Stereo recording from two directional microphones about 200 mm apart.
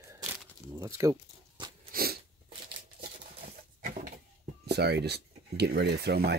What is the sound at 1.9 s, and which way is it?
Sneeze, 50° right (ahead or behind).